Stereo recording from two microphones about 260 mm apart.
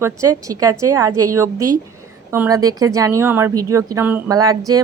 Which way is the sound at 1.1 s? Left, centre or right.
Right.